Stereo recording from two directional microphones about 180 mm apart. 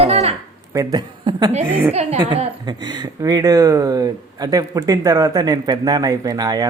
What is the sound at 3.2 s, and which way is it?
A woman's voice, 20° right (ahead or behind).